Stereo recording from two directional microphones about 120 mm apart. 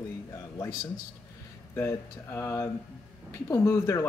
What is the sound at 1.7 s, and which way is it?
Speech, 20° left (ahead or behind).